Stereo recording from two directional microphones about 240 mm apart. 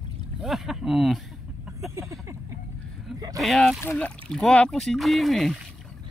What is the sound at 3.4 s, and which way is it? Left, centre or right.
Speech, centre.